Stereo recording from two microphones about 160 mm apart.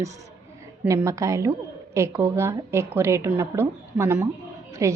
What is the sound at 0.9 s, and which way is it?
A woman's voice, 20° right (ahead or behind).